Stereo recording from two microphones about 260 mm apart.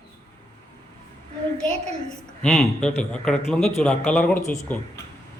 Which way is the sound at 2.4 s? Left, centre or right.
Centre.